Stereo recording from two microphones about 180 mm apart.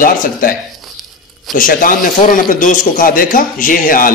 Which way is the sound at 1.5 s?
50° left (ahead or behind).